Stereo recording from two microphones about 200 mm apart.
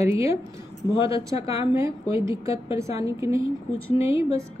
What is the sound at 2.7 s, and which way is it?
Speech, 15° right (ahead or behind).